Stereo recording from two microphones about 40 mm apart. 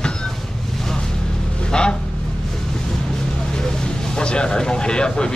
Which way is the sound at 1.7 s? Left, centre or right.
Left.